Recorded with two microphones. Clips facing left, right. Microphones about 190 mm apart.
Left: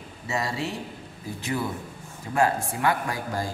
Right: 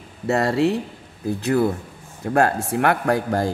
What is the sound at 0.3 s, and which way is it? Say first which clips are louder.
A woman's voice: right 11 dB; 60° right (ahead or behind).